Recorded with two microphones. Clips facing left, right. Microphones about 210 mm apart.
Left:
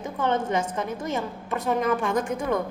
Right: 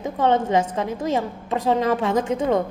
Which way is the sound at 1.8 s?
25° right (ahead or behind).